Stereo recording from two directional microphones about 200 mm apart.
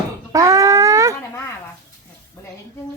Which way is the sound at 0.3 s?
15° right (ahead or behind).